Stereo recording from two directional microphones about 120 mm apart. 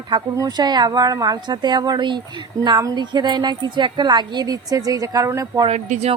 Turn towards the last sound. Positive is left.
turn(degrees=-80)